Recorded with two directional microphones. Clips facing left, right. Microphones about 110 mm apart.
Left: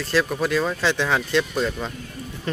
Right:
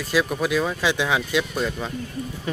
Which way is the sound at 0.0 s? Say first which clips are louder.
Even; 10° right (ahead or behind).